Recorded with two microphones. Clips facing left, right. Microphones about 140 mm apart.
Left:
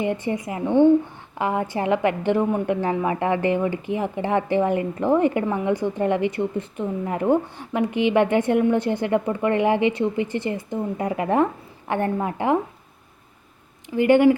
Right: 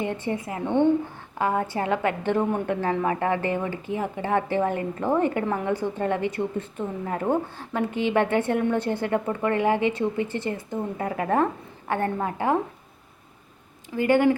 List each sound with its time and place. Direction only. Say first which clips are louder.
0.0 s a woman's voice: left 3 dB; 15° left (ahead or behind)
13.9 s a woman's voice: left 4 dB; 20° left (ahead or behind)